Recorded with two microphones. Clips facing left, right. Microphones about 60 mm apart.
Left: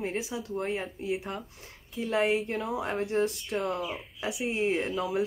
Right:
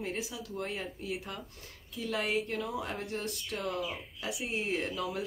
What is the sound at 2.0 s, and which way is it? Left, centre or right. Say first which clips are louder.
Speech: left 6 dB; left.